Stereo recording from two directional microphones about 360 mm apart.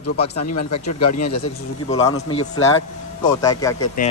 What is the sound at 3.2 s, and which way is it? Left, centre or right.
Speech, centre.